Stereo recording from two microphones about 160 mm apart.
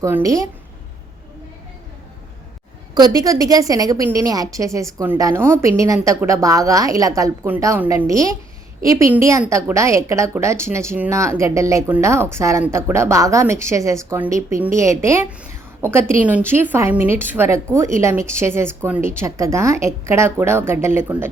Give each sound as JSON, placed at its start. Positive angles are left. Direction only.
{"t": 0.0, "sound": "a woman's voice", "side_deg": -20}
{"t": 2.9, "sound": "a woman's voice", "side_deg": -25}